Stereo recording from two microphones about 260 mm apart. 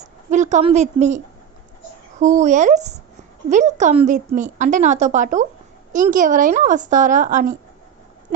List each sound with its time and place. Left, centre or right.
0.0 s a woman's voice: right